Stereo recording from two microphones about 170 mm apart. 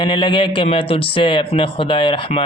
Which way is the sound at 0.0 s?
30° left (ahead or behind).